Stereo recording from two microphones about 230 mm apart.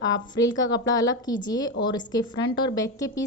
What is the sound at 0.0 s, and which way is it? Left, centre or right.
A woman's voice, centre.